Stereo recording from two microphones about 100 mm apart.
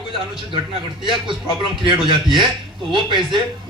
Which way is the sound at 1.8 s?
50° right (ahead or behind).